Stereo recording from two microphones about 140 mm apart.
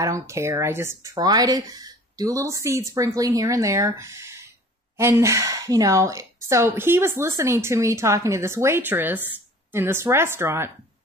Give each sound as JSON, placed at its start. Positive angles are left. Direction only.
{"t": 0.0, "sound": "speech", "side_deg": -20}
{"t": 1.1, "sound": "speech", "side_deg": -30}